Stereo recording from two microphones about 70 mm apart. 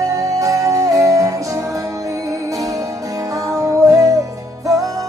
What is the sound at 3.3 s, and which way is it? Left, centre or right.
Music, right.